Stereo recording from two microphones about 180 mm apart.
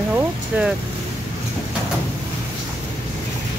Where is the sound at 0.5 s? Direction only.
10° right (ahead or behind).